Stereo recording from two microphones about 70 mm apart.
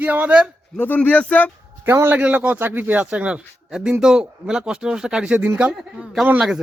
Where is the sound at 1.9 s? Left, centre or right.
Right.